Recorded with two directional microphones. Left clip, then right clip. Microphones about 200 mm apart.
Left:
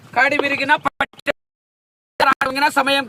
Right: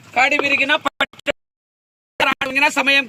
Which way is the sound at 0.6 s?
10° left (ahead or behind).